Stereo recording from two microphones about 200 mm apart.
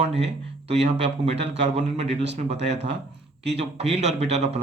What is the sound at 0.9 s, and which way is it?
Speech, 60° right (ahead or behind).